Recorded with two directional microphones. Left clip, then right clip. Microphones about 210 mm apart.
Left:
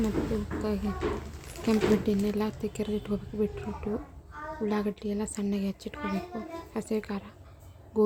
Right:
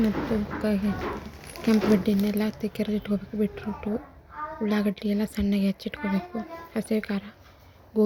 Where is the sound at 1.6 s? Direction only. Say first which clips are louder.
Right 3 dB; 5° right (ahead or behind).